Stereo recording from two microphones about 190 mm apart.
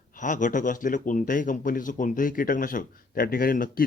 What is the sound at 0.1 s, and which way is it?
A man's voice, 40° left (ahead or behind).